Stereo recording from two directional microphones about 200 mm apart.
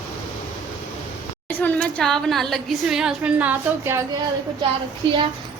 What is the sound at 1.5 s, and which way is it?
A woman's voice, 10° left (ahead or behind).